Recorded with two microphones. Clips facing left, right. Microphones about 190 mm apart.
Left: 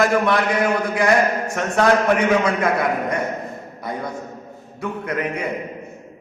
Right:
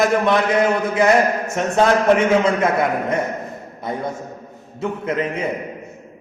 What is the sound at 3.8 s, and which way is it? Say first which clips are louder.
A man's voice: right 3 dB; 25° right (ahead or behind).